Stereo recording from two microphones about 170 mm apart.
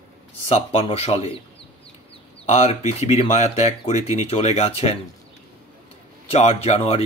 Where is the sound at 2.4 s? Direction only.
40° left (ahead or behind).